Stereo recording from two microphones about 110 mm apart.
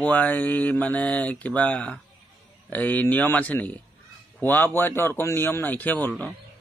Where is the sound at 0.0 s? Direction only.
15° left (ahead or behind).